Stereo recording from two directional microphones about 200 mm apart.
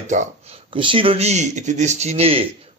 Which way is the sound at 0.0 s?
35° right (ahead or behind).